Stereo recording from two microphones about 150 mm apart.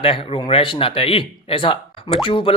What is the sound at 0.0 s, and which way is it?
Speech, 35° left (ahead or behind).